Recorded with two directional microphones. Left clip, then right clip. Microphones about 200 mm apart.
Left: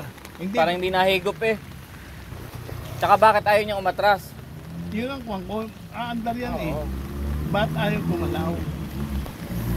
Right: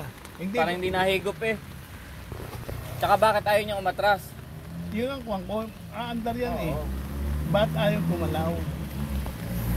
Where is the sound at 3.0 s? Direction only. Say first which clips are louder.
Left 5 dB; 15° left (ahead or behind).